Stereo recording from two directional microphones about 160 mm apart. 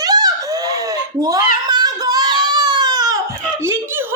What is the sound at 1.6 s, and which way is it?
Baby cry, 25° right (ahead or behind).